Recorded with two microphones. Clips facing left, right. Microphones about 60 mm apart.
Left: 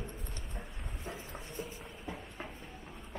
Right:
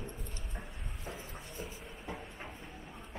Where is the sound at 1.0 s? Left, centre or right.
Centre.